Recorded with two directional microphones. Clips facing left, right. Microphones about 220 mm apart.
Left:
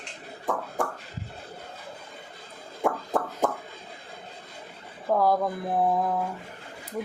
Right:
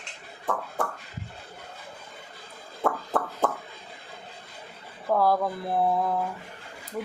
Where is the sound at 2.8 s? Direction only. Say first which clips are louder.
Left 1 dB; 15° left (ahead or behind).